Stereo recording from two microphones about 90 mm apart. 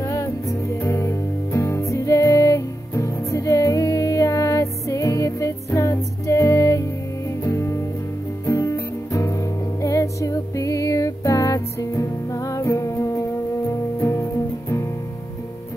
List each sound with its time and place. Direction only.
0.0 s music: 35° left (ahead or behind)